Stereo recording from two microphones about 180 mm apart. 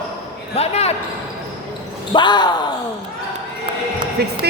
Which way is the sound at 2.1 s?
25° left (ahead or behind).